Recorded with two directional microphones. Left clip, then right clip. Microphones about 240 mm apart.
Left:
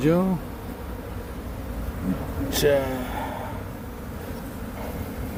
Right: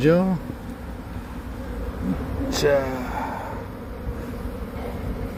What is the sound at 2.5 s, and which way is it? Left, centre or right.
Speech, centre.